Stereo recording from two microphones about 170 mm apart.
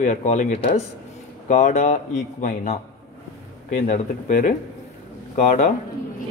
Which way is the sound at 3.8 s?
50° left (ahead or behind).